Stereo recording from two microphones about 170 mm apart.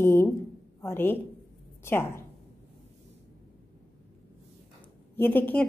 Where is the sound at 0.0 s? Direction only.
15° left (ahead or behind).